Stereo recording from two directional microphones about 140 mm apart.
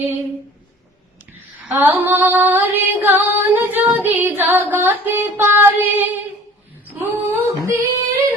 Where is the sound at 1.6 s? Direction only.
15° right (ahead or behind).